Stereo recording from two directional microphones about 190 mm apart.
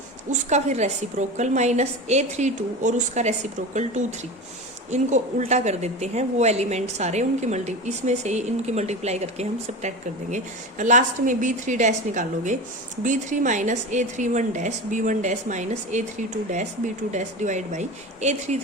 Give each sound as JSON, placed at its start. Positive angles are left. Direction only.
{"t": 0.3, "sound": "a woman's voice", "side_deg": -35}
{"t": 4.9, "sound": "a woman's voice", "side_deg": -40}